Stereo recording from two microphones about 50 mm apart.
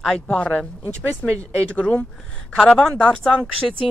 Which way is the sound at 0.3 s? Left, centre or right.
Left.